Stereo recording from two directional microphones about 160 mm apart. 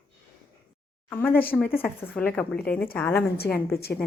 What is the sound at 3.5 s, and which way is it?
Speech, 80° left.